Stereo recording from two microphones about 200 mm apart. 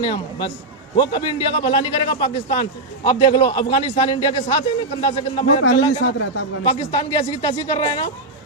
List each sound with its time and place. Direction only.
0.0 s a man's voice: 25° left (ahead or behind)
5.7 s a man's voice: 65° left (ahead or behind)
6.7 s a man's voice: 25° left (ahead or behind)